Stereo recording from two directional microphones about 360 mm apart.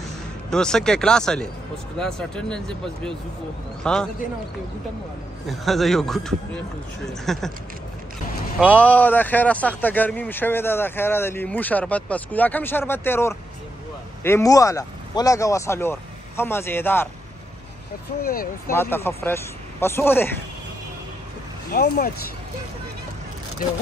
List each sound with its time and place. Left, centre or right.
0.5 s speech: centre
3.8 s speech: centre
5.5 s speech: centre
8.5 s speech: centre
18.2 s speech: left
18.7 s speech: centre
21.7 s speech: left